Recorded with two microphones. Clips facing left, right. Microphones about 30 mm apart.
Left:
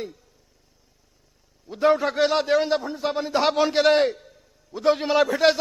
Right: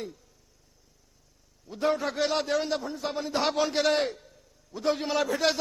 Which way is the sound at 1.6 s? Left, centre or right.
Left.